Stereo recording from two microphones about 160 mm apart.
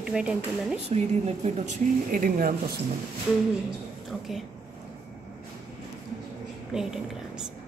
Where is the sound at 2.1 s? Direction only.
60° right (ahead or behind).